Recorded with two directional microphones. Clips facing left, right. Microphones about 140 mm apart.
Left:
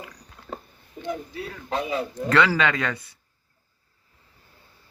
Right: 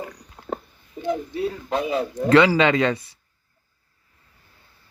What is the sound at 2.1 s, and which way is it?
Speech, 20° right (ahead or behind).